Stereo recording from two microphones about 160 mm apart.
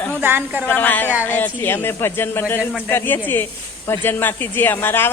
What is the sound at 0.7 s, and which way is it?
A woman's voice, 10° left (ahead or behind).